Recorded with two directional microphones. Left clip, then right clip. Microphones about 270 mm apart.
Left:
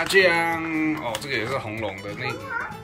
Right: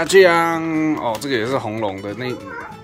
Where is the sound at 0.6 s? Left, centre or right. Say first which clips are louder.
Right 5 dB; right.